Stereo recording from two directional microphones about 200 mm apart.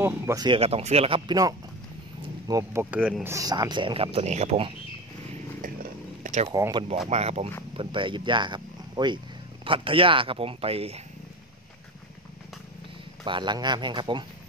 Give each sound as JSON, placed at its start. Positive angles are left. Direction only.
{"t": 0.0, "sound": "speech", "side_deg": -15}
{"t": 3.3, "sound": "speech", "side_deg": -15}
{"t": 6.2, "sound": "a sound", "side_deg": -35}
{"t": 6.5, "sound": "speech", "side_deg": -20}
{"t": 13.2, "sound": "speech", "side_deg": -25}